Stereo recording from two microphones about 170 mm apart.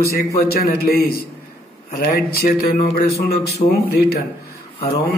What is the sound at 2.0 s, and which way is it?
A man's voice, 50° left (ahead or behind).